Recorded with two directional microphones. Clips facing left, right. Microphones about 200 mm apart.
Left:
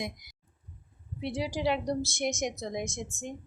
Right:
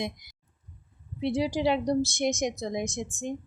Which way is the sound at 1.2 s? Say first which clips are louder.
Right 5 dB; 20° right (ahead or behind).